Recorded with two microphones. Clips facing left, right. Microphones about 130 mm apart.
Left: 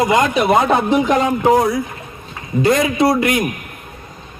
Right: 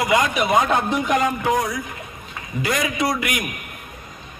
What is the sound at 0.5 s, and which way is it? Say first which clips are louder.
A man's voice: left 3 dB; 30° left (ahead or behind).